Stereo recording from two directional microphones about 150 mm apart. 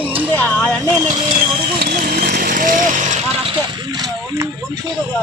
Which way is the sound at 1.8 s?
90° right.